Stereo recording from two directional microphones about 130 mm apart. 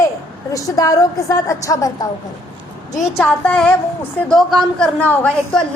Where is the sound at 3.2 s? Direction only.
10° left (ahead or behind).